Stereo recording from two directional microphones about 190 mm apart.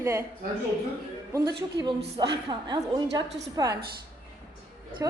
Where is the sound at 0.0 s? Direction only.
15° right (ahead or behind).